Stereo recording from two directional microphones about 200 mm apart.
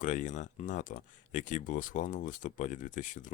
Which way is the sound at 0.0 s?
40° left (ahead or behind).